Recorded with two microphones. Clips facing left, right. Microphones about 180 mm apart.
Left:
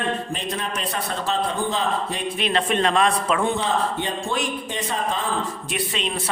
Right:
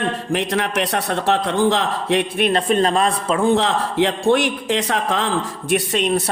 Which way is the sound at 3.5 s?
90° right.